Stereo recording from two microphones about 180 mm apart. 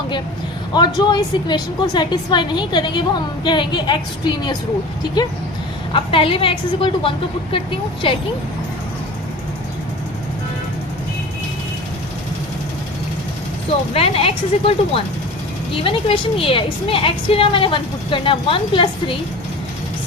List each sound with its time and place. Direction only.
0.7 s a woman's voice: 25° left (ahead or behind)
5.9 s a woman's voice: 30° left (ahead or behind)
13.7 s a woman's voice: 35° left (ahead or behind)